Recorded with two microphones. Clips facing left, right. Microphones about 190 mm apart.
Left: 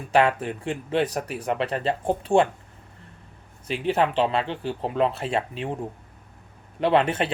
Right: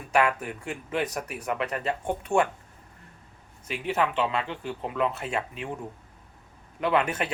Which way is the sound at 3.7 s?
30° left (ahead or behind).